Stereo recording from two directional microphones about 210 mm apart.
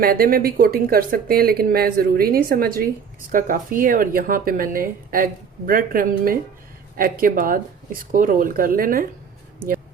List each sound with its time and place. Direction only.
0.0 s speech: 45° right (ahead or behind)